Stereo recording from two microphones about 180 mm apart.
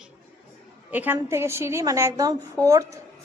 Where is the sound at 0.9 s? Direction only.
10° right (ahead or behind).